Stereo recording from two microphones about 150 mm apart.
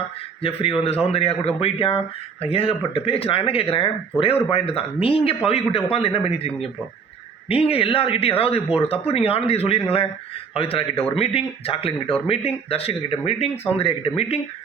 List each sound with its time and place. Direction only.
0.9 s speech: 40° left (ahead or behind)